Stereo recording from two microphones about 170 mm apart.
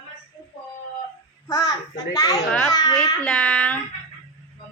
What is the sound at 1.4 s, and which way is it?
Speech, 20° left (ahead or behind).